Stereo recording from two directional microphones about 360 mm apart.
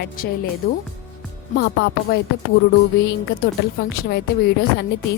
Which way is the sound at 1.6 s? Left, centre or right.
Left.